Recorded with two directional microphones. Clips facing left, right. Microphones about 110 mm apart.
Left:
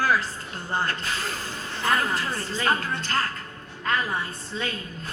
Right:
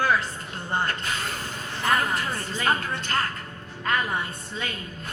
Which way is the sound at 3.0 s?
35° left (ahead or behind).